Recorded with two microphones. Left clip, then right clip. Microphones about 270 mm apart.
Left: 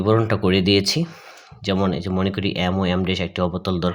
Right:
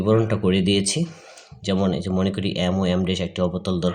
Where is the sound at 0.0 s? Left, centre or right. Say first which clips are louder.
Left 1 dB; left.